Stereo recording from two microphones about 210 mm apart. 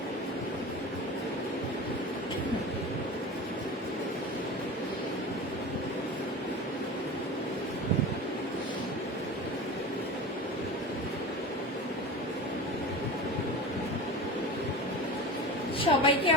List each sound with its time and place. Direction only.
15.8 s a woman's voice: 25° left (ahead or behind)